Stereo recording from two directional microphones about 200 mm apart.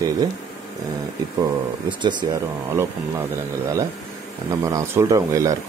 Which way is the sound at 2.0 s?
20° right (ahead or behind).